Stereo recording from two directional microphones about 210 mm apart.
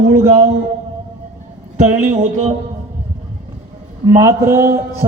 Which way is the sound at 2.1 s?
35° right (ahead or behind).